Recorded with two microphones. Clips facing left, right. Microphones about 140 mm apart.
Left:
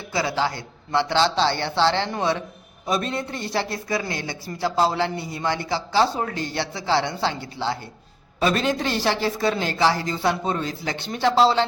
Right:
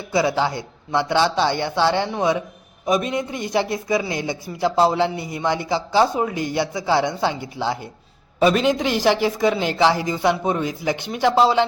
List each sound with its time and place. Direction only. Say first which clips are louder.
0.1 s speech: right 4 dB; 20° right (ahead or behind)